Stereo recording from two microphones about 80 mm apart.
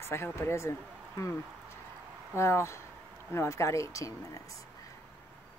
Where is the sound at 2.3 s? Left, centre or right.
Left.